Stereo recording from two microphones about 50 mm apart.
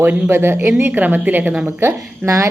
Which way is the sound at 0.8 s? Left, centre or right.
Right.